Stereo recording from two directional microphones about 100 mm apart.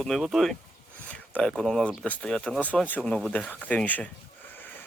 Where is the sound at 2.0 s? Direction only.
10° left (ahead or behind).